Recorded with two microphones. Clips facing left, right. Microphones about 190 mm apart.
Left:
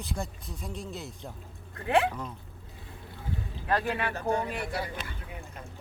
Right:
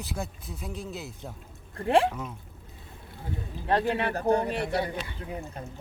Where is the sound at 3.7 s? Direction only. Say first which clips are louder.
Right 3 dB; 25° right (ahead or behind).